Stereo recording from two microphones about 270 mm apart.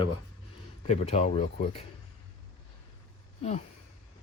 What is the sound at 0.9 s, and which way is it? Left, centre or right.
Speech, left.